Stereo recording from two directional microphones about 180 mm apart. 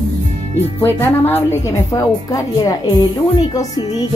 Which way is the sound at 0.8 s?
10° left (ahead or behind).